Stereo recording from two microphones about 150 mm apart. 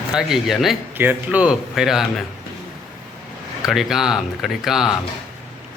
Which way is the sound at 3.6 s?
Centre (ahead or behind).